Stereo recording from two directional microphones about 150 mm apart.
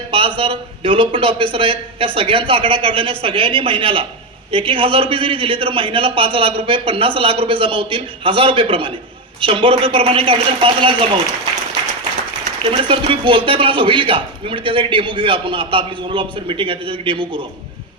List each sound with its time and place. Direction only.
0.1 s speech: 35° right (ahead or behind)
12.6 s speech: 35° right (ahead or behind)